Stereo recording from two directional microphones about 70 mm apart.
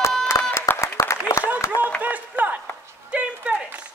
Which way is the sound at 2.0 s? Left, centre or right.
Right.